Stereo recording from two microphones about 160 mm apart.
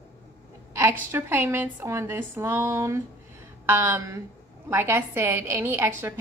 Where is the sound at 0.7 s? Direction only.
15° right (ahead or behind).